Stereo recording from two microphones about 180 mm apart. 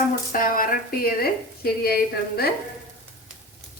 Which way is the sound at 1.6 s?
60° left (ahead or behind).